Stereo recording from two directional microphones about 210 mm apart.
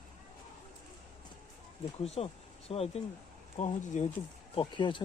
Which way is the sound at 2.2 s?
30° left (ahead or behind).